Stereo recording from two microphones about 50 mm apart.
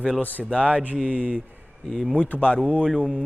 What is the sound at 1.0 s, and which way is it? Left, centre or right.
Speech, right.